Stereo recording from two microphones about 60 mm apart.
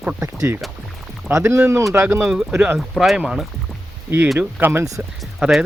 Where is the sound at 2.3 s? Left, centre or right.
Centre.